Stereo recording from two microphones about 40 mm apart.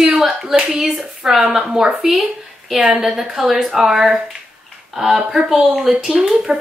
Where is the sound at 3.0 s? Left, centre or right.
Centre.